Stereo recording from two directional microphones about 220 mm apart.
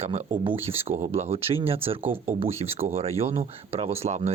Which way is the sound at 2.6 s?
25° right (ahead or behind).